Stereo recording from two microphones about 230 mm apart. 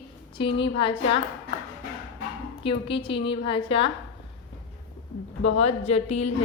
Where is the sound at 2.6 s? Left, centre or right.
Left.